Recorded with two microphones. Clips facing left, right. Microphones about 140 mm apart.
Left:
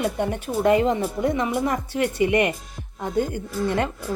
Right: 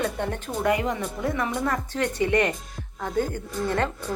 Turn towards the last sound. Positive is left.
turn(degrees=10)  # may be behind; listen again after turning